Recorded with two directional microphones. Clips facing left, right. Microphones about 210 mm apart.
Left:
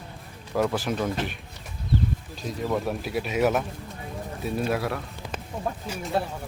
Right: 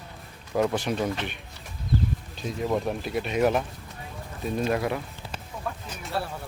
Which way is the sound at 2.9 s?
5° left (ahead or behind).